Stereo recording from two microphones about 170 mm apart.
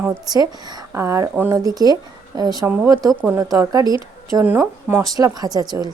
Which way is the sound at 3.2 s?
10° right (ahead or behind).